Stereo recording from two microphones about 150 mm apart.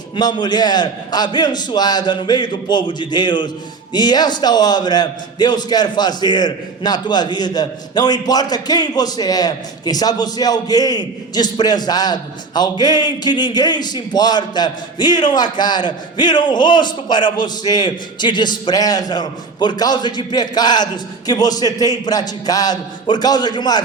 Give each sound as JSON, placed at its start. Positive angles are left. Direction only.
{"t": 0.2, "sound": "a man's voice", "side_deg": 30}